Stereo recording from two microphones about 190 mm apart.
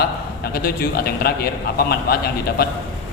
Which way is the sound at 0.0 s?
55° left (ahead or behind).